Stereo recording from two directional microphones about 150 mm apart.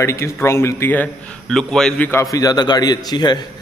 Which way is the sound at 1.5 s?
5° left (ahead or behind).